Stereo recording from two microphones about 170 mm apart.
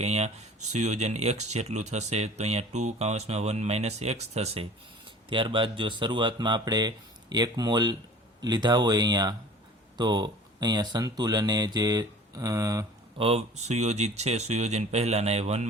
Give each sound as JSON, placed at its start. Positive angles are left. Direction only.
{"t": 0.0, "sound": "speech", "side_deg": -40}
{"t": 13.1, "sound": "speech", "side_deg": -35}